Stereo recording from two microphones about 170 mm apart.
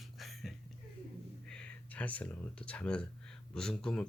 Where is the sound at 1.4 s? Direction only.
5° left (ahead or behind).